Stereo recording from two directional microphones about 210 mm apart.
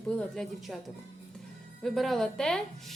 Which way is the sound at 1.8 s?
Centre (ahead or behind).